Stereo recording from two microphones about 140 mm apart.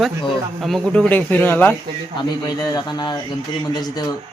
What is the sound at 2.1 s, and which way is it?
Speech, 30° left (ahead or behind).